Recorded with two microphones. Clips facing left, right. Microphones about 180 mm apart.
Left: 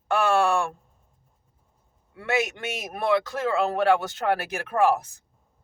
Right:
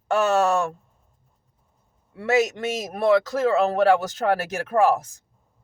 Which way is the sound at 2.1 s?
35° right (ahead or behind).